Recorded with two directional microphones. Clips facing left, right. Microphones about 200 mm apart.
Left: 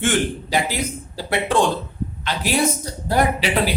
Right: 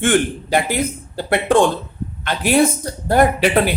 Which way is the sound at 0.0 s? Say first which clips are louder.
Right 4 dB; 55° right (ahead or behind).